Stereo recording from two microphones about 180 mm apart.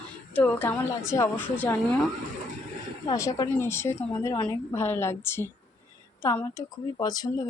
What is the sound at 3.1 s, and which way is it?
Speech, 20° left (ahead or behind).